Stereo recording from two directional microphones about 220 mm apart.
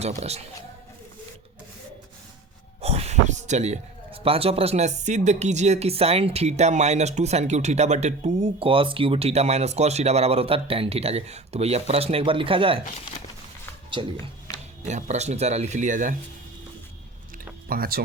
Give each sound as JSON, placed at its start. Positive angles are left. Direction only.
{"t": 0.0, "sound": "a man's voice", "side_deg": -30}
{"t": 2.8, "sound": "a man's voice", "side_deg": -30}
{"t": 14.0, "sound": "a man's voice", "side_deg": -25}
{"t": 17.7, "sound": "speech", "side_deg": -45}